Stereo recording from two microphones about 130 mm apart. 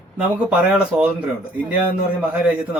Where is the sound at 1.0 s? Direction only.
10° right (ahead or behind).